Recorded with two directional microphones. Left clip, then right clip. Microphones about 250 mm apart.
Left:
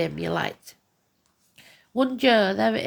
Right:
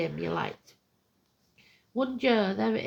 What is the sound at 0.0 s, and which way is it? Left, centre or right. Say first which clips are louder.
A woman's voice: left 5 dB; left.